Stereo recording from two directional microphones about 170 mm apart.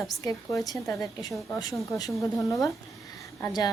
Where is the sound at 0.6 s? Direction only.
20° left (ahead or behind).